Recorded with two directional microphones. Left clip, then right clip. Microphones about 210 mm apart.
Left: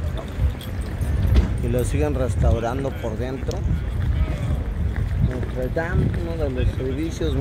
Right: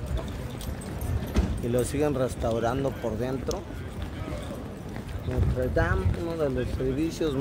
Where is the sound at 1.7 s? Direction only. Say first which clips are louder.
Left 2 dB; 5° right (ahead or behind).